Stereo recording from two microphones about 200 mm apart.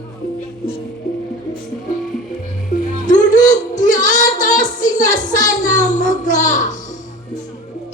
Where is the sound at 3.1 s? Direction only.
40° left (ahead or behind).